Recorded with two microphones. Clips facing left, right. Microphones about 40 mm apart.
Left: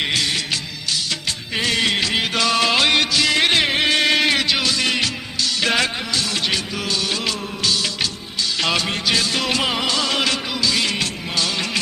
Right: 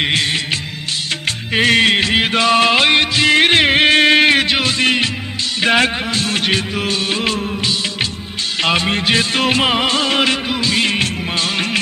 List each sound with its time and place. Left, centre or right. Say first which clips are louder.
1.5 s music: right 7 dB; right
8.6 s music: right 6 dB; right